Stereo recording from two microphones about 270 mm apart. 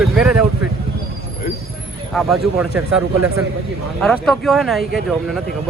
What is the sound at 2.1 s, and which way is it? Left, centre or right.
Speech, centre.